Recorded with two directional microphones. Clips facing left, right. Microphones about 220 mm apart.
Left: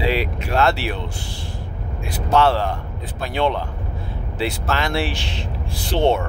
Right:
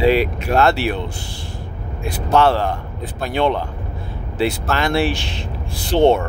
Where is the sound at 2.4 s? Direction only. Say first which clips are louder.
Right 2 dB; 50° right (ahead or behind).